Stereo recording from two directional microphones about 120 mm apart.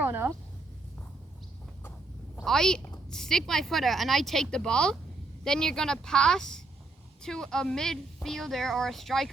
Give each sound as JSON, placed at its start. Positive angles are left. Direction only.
{"t": 0.0, "sound": "speech", "side_deg": -15}
{"t": 2.3, "sound": "a woman's voice", "side_deg": 5}